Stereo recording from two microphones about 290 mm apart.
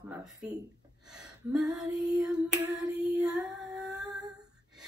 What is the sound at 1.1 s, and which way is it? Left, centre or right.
Gasp, centre.